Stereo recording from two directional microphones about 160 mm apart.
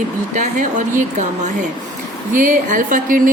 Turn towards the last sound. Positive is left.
turn(degrees=-55)  # may be behind; listen again after turning